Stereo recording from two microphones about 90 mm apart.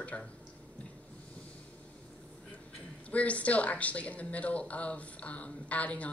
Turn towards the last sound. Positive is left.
turn(degrees=15)  # may be behind; listen again after turning